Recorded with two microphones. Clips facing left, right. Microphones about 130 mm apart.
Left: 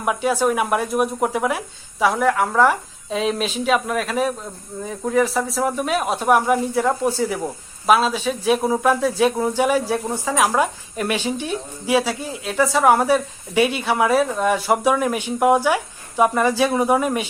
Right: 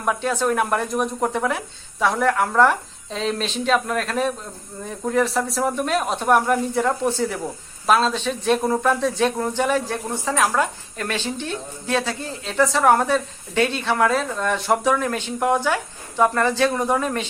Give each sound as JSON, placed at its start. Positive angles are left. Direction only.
{"t": 0.0, "sound": "speech", "side_deg": 10}